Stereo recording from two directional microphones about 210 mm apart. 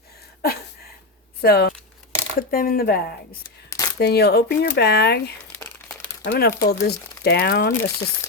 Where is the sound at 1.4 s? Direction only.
50° left (ahead or behind).